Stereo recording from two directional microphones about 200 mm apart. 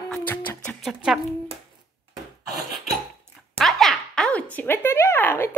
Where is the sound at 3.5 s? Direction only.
Centre (ahead or behind).